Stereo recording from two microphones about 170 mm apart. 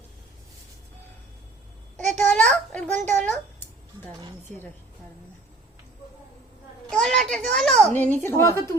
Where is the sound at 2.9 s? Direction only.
45° right (ahead or behind).